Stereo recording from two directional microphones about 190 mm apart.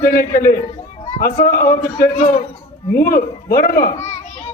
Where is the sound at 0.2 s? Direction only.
50° left (ahead or behind).